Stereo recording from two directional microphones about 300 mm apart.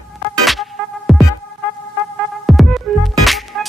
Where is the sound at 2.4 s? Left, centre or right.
Centre.